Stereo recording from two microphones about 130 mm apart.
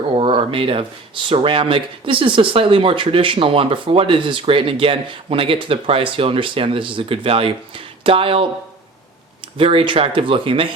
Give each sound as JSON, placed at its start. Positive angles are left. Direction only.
{"t": 0.1, "sound": "a sound", "side_deg": -40}
{"t": 1.3, "sound": "speech", "side_deg": -45}
{"t": 9.6, "sound": "speech", "side_deg": -45}